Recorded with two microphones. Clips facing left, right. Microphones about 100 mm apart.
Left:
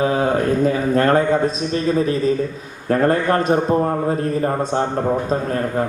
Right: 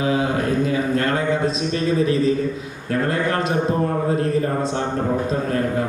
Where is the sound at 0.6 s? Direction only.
40° left (ahead or behind).